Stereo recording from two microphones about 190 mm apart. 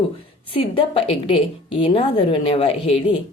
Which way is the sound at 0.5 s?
30° left (ahead or behind).